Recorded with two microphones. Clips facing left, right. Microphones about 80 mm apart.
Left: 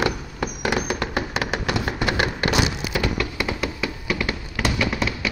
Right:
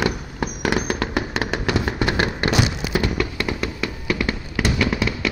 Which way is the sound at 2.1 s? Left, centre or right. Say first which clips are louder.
Even; right.